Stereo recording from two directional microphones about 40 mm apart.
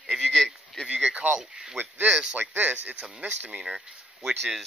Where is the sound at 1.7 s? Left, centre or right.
Right.